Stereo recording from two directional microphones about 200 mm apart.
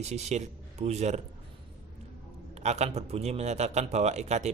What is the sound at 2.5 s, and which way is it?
A man's voice, 35° right (ahead or behind).